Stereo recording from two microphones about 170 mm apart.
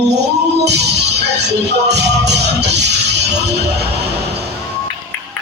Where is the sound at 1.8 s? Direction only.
85° right.